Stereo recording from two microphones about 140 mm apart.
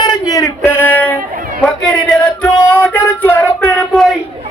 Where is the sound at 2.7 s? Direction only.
10° left (ahead or behind).